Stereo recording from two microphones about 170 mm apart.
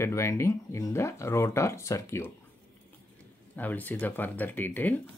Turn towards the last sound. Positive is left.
turn(degrees=10)  # may be behind; listen again after turning